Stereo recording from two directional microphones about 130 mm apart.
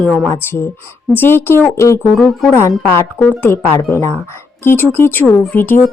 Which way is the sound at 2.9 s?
15° left (ahead or behind).